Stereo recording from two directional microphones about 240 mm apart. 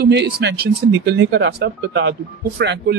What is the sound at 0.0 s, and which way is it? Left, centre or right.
Speech, right.